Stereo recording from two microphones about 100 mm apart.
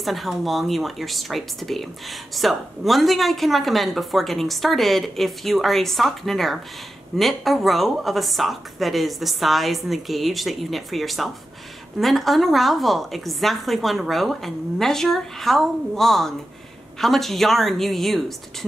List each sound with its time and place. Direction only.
0.0 s speech: centre (ahead or behind)